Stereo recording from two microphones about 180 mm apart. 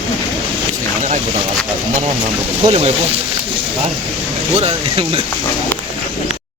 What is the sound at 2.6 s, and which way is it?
Speech, 35° right (ahead or behind).